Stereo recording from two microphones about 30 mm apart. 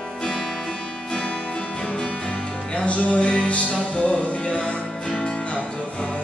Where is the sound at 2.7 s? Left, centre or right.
Left.